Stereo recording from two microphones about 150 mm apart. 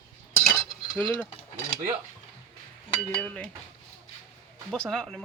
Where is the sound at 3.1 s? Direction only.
10° left (ahead or behind).